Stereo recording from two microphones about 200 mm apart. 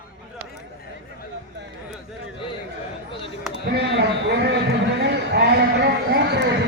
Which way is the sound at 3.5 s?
60° right (ahead or behind).